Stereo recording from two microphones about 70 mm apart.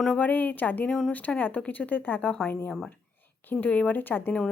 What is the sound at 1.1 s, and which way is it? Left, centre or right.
A woman's voice, left.